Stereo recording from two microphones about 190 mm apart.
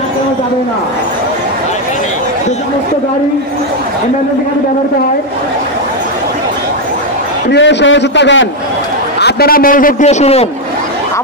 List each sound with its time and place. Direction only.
7.4 s a man's voice: 70° left (ahead or behind)
9.2 s a man's voice: 50° left (ahead or behind); by 10.5 s 35° left (ahead or behind)